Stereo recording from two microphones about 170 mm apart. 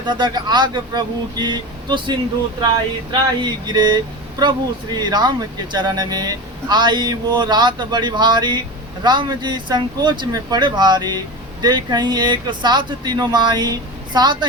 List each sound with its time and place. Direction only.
0.0 s speech: 25° right (ahead or behind)